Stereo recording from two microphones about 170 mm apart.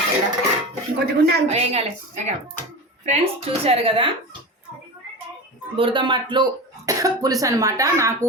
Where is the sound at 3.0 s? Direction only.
35° right (ahead or behind).